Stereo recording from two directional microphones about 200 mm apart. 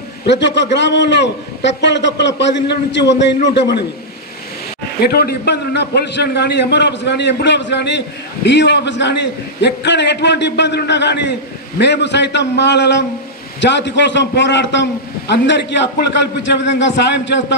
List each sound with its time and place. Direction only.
0.3 s a man's voice: 60° left (ahead or behind)
5.0 s a man's voice: 50° left (ahead or behind)